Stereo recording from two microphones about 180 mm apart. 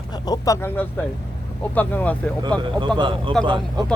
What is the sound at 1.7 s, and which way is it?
Speech, 10° left (ahead or behind).